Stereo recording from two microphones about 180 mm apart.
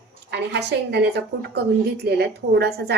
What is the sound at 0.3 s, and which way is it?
A woman's voice, 70° right (ahead or behind).